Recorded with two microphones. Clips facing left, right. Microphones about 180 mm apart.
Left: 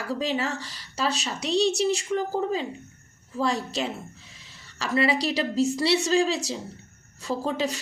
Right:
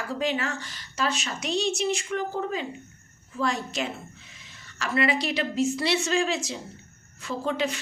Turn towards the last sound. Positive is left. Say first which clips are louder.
# left 1 dB
turn(degrees=35)  # may be behind; listen again after turning